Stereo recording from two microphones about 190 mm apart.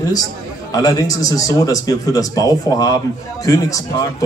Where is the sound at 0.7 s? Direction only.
20° left (ahead or behind).